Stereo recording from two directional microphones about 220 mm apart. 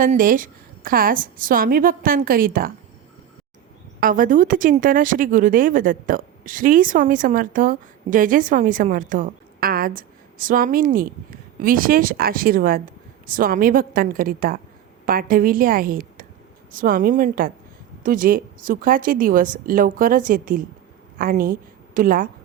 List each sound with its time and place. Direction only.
0.0 s speech: 35° right (ahead or behind)
4.0 s a woman's voice: 40° right (ahead or behind)